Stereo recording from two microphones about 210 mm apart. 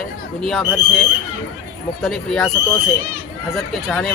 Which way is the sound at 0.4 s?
Centre (ahead or behind).